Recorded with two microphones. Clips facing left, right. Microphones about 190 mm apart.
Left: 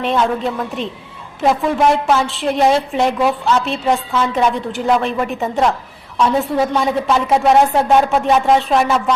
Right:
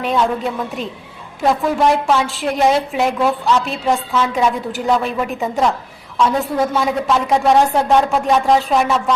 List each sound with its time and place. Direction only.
0.0 s a woman's voice: centre (ahead or behind)